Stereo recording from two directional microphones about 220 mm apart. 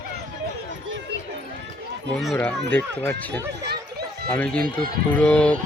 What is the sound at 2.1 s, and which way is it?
Speech, centre (ahead or behind).